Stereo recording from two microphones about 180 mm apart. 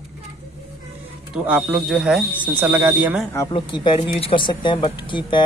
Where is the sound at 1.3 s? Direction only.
5° right (ahead or behind).